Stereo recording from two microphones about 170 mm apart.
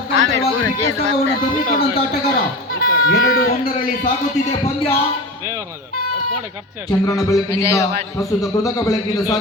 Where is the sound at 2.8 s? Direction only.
60° left (ahead or behind).